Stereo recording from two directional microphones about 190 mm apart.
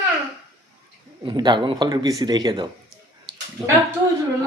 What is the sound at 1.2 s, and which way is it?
Speech, 25° right (ahead or behind).